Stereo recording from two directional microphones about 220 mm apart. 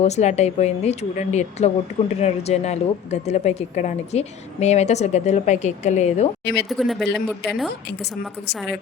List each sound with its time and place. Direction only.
0.0 s a woman's voice: 30° left (ahead or behind)
6.7 s speech: centre (ahead or behind)
7.9 s a woman's voice: 50° left (ahead or behind)
8.5 s speech: centre (ahead or behind)